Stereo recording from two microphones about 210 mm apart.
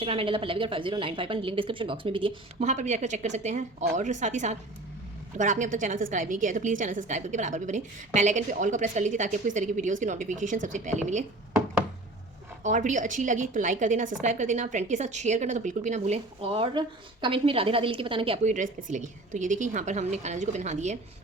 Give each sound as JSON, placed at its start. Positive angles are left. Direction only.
{"t": 0.0, "sound": "a woman's voice", "side_deg": -25}
{"t": 12.6, "sound": "a woman's voice", "side_deg": -35}
{"t": 18.5, "sound": "a woman's voice", "side_deg": -40}